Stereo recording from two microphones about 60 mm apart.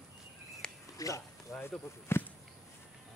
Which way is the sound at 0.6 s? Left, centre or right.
Centre.